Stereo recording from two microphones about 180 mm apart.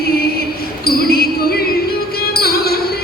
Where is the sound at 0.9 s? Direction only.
55° left (ahead or behind).